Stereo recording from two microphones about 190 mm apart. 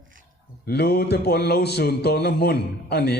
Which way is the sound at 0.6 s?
55° left (ahead or behind).